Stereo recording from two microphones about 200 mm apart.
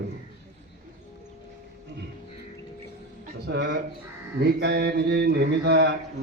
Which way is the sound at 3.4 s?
60° right (ahead or behind).